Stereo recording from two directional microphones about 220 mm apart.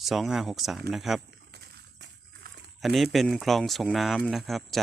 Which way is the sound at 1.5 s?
50° right (ahead or behind).